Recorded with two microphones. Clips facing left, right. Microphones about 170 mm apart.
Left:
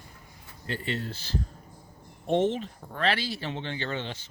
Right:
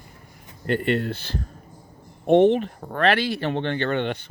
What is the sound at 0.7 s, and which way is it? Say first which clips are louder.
Speech: right 10 dB; 65° right (ahead or behind).